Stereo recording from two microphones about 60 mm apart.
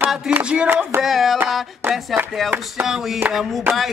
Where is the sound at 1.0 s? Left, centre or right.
Centre.